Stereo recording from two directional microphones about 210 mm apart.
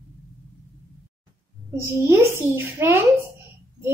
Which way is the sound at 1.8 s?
10° right (ahead or behind).